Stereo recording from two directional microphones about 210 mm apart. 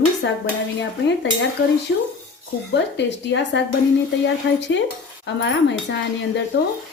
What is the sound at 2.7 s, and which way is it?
A woman's voice, 55° left (ahead or behind).